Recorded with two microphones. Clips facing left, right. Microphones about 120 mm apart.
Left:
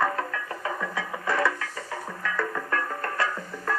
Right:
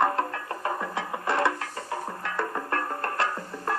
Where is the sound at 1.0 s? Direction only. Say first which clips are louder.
Even; 20° right (ahead or behind).